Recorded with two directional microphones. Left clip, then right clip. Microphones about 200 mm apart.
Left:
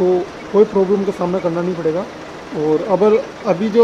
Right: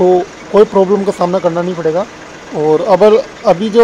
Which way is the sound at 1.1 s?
20° right (ahead or behind).